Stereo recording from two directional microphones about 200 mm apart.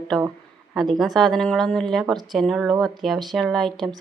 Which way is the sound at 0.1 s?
5° left (ahead or behind).